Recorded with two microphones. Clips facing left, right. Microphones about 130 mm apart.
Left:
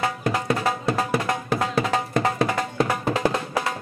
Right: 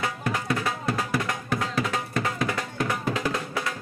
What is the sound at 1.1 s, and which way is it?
Music, 30° left (ahead or behind).